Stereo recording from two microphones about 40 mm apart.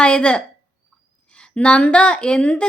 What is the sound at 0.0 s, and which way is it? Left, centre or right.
Speech, left.